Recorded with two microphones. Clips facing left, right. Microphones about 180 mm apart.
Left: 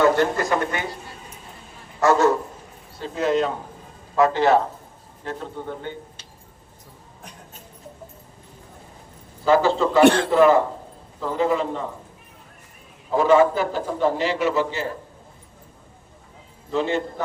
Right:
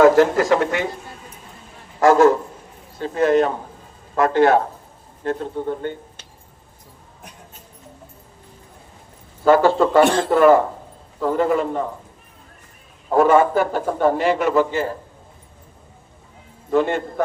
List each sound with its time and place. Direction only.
0.0 s speech: 90° right
2.0 s speech: 90° right
3.0 s a man's voice: 55° right (ahead or behind)
5.8 s a sound: 55° right (ahead or behind)
9.4 s a man's voice: 55° right (ahead or behind)
10.0 s a man's voice: 65° left (ahead or behind)
10.2 s a man's voice: 55° right (ahead or behind)
13.1 s a man's voice: 55° right (ahead or behind)
16.7 s a man's voice: 55° right (ahead or behind)